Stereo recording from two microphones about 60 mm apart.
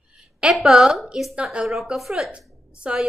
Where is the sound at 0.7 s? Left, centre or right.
Centre.